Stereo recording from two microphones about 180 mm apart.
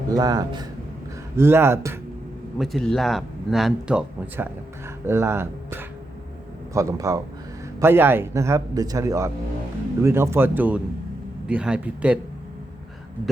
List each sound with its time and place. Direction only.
0.1 s a man's voice: 20° right (ahead or behind)
2.6 s a man's voice: centre (ahead or behind)